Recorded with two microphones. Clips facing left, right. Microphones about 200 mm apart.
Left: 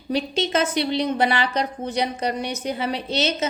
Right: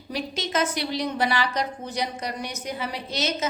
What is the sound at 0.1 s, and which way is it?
A woman's voice, 30° left (ahead or behind).